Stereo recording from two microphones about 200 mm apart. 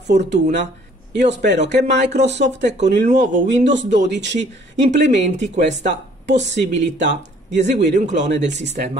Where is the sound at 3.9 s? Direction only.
60° right (ahead or behind).